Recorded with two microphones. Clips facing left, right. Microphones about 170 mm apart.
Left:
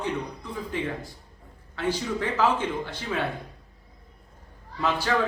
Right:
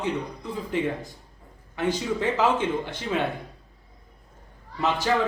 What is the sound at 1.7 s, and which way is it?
Speech, 20° right (ahead or behind).